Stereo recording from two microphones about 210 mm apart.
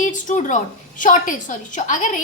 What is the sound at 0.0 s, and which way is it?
A woman's voice, 35° left (ahead or behind).